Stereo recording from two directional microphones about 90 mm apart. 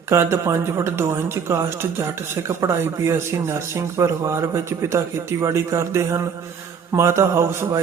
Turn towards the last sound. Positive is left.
turn(degrees=-30)  # may be behind; listen again after turning